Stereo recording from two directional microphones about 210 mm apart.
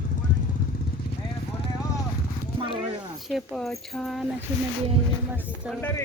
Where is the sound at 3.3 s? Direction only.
Centre (ahead or behind).